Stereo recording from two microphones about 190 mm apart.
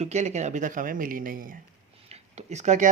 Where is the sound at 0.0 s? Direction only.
35° right (ahead or behind).